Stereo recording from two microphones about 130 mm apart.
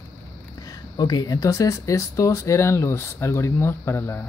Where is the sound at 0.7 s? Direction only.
30° left (ahead or behind).